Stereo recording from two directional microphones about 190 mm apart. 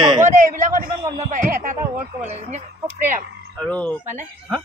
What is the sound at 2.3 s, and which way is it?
Speech, 35° right (ahead or behind).